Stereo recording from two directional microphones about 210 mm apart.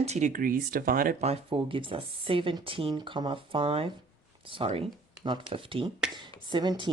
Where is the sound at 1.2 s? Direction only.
30° right (ahead or behind).